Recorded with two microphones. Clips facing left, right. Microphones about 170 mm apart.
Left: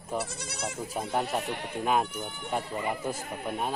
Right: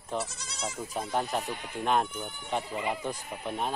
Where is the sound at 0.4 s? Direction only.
60° left (ahead or behind).